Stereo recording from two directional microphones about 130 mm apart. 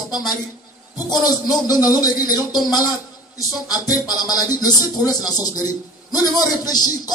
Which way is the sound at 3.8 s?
30° left (ahead or behind).